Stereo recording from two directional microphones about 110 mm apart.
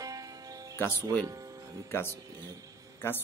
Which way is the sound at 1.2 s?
35° right (ahead or behind).